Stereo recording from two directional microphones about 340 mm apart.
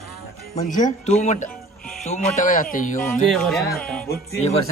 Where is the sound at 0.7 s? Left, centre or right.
Left.